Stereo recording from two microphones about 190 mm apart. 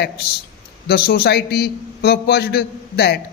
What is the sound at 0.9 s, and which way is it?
A man's voice, 55° left (ahead or behind).